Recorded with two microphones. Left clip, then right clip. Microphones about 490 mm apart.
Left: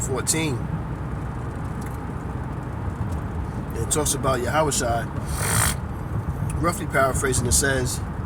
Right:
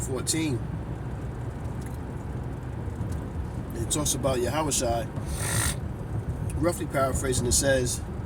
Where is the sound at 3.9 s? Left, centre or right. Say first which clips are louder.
Left 4 dB; right.